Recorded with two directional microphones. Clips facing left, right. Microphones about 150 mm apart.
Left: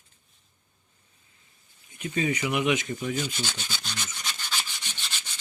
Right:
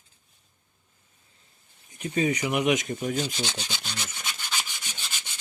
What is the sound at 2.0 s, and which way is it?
Speech, 35° right (ahead or behind).